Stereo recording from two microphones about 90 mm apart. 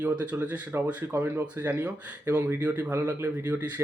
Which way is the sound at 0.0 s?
15° right (ahead or behind).